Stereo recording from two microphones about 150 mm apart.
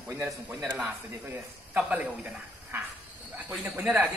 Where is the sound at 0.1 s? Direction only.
15° right (ahead or behind).